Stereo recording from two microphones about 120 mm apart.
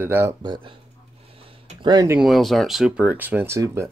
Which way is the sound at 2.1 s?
Centre (ahead or behind).